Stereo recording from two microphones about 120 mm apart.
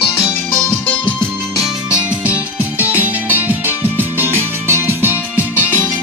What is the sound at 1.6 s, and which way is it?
Music, 10° right (ahead or behind).